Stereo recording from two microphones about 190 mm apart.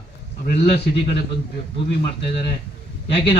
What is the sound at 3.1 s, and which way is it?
Speech, 30° left (ahead or behind).